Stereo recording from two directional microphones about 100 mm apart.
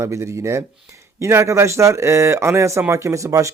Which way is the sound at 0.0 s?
30° right (ahead or behind).